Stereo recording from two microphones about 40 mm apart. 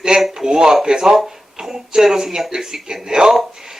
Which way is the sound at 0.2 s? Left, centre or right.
Centre.